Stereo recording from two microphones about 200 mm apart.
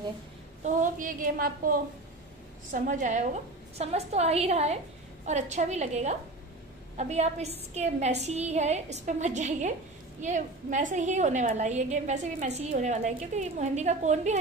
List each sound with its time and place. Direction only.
0.7 s a woman's voice: 40° right (ahead or behind)